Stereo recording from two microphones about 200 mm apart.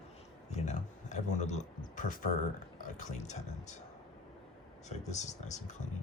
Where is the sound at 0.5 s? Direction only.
35° left (ahead or behind).